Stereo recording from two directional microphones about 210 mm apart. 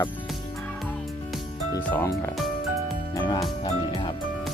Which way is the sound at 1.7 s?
15° left (ahead or behind).